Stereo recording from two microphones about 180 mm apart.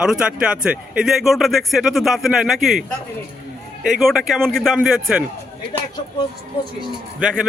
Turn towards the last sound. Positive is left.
turn(degrees=-5)  # may be behind; listen again after turning